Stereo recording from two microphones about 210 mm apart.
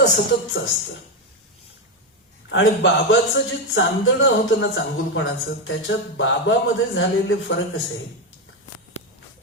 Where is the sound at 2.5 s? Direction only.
65° left (ahead or behind).